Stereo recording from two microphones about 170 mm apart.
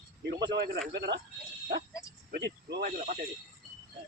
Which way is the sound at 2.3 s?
85° right.